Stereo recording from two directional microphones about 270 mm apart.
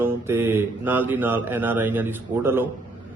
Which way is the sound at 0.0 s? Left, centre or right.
Centre.